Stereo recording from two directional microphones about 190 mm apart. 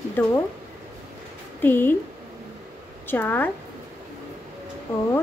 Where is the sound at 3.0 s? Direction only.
10° left (ahead or behind).